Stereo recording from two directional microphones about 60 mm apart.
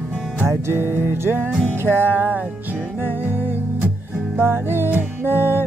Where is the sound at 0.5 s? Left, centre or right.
Right.